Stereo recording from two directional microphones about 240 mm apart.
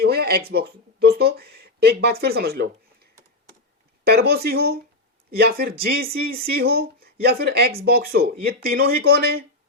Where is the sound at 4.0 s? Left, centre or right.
Right.